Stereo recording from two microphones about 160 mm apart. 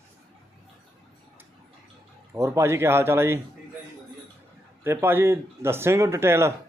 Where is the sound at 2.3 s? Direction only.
15° right (ahead or behind).